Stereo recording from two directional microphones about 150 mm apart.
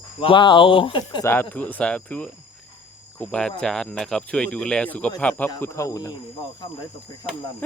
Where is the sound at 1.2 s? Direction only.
15° left (ahead or behind).